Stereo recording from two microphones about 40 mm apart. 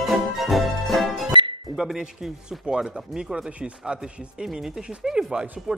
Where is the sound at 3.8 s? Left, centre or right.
Centre.